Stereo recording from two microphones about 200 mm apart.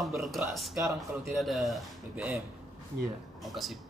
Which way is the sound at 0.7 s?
15° right (ahead or behind).